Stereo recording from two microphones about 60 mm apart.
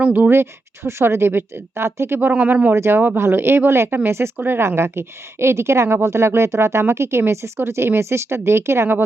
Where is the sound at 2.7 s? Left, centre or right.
Right.